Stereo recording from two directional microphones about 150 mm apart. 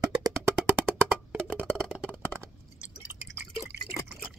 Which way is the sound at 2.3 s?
15° right (ahead or behind).